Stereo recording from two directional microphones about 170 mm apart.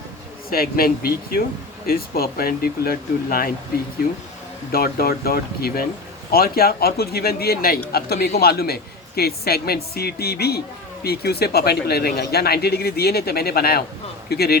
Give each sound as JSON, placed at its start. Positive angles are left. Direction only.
{"t": 0.5, "sound": "speech", "side_deg": 60}
{"t": 4.7, "sound": "speech", "side_deg": 65}